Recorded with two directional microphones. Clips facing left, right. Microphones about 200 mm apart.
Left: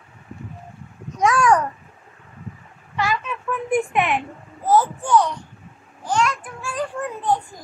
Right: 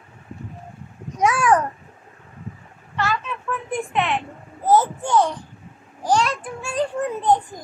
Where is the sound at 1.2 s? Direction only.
5° right (ahead or behind).